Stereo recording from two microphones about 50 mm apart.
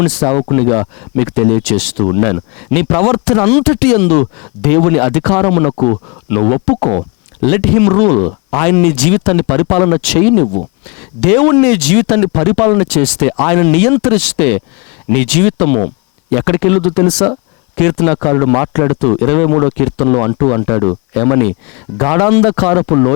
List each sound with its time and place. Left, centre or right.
0.0 s speech: centre